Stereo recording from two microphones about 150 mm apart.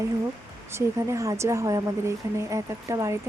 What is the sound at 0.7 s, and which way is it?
Speech, 20° right (ahead or behind).